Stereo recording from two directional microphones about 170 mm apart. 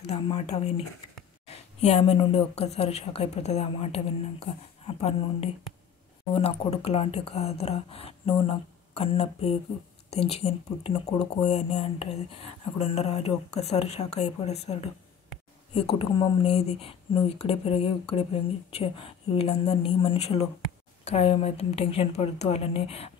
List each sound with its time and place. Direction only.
0.0 s a woman's voice: 35° left (ahead or behind)